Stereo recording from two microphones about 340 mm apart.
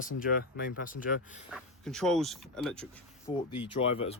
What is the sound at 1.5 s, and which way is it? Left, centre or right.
Speech, centre.